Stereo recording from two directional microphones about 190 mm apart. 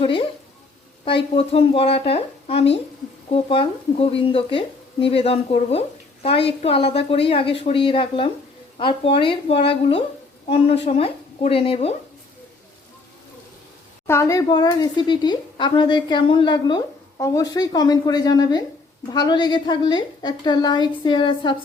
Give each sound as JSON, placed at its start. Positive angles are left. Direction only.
{"t": 0.0, "sound": "a woman's voice", "side_deg": 30}
{"t": 14.1, "sound": "a woman's voice", "side_deg": 15}